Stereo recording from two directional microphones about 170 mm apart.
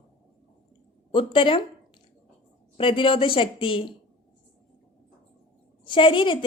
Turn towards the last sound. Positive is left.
turn(degrees=30)  # may be behind; listen again after turning